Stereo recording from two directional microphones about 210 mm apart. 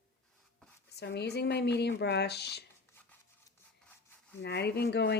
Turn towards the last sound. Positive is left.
turn(degrees=50)  # may be behind; listen again after turning